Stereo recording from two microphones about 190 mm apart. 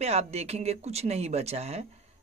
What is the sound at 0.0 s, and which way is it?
Speech, 35° right (ahead or behind).